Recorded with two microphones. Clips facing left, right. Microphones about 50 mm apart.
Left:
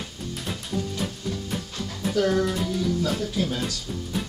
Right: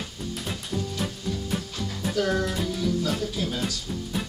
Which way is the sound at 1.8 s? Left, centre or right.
Centre.